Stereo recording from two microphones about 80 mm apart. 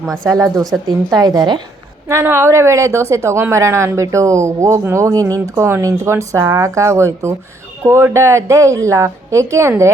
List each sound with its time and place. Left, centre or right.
0.3 s a woman's voice: right
2.2 s speech: right